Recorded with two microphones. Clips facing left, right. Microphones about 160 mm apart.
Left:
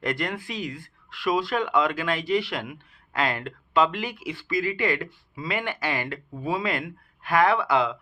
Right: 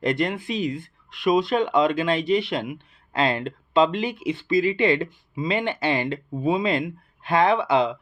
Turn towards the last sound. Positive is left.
turn(degrees=-20)  # may be behind; listen again after turning